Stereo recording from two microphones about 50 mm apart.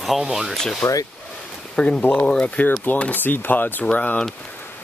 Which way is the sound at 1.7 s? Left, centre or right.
Left.